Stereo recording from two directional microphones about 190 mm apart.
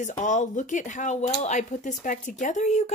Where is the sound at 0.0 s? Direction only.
40° left (ahead or behind).